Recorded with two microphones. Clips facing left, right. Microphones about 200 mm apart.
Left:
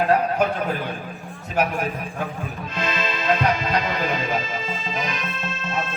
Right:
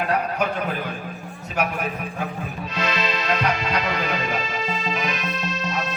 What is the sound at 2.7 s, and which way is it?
Music, 50° left (ahead or behind).